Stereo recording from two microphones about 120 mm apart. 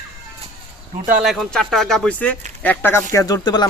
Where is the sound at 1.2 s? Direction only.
5° left (ahead or behind).